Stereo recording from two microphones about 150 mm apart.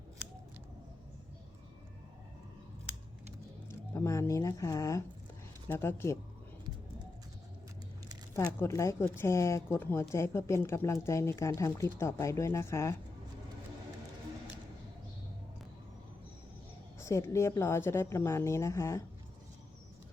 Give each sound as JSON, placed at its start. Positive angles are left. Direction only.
{"t": 3.7, "sound": "speech", "side_deg": 20}
{"t": 8.6, "sound": "a woman's voice", "side_deg": 20}
{"t": 17.0, "sound": "a woman's voice", "side_deg": 20}